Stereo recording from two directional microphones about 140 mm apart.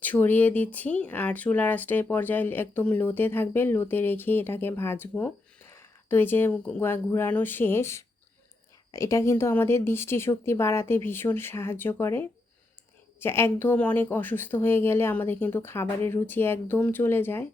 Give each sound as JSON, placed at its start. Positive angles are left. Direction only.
{"t": 0.0, "sound": "speech", "side_deg": 15}